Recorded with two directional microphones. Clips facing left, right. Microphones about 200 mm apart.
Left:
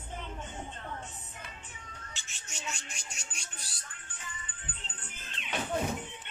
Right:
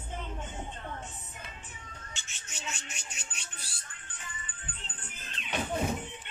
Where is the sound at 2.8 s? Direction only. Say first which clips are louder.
Right 1 dB; 65° right (ahead or behind).